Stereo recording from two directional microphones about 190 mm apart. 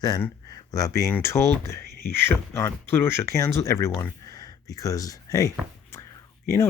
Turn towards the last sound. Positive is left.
turn(degrees=15)  # may be behind; listen again after turning